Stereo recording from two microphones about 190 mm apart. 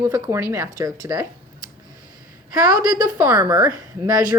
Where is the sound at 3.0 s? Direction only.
10° right (ahead or behind).